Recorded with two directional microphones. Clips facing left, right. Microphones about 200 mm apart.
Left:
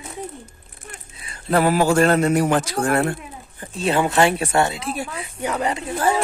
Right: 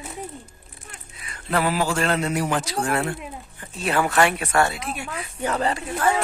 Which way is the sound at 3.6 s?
25° left (ahead or behind).